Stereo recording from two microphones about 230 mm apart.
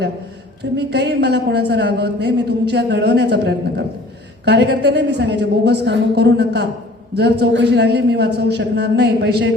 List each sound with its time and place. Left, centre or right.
0.8 s a man's voice: right